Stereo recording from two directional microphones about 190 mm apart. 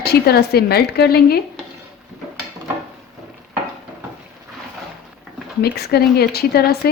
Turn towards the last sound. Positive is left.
turn(degrees=55)  # may be behind; listen again after turning